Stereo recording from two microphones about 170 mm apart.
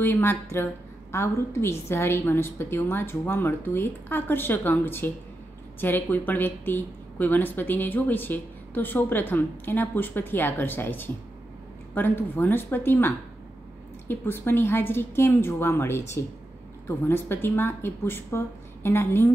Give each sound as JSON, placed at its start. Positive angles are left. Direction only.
{"t": 0.0, "sound": "speech", "side_deg": 15}